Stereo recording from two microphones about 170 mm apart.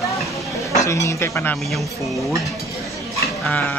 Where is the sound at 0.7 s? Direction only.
20° left (ahead or behind).